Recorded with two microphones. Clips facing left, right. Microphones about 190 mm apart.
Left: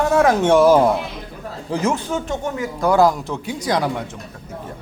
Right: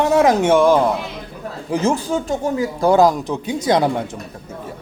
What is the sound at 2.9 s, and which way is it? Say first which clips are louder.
Speech: even; 15° right (ahead or behind).